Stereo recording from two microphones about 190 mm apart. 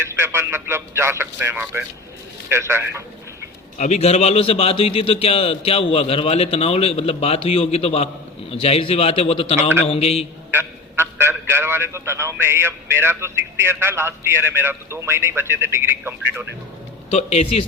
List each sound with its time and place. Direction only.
0.1 s a man's voice: 15° right (ahead or behind)
3.8 s a man's voice: 35° left (ahead or behind)
10.5 s a man's voice: 15° right (ahead or behind)
17.1 s a man's voice: 35° left (ahead or behind)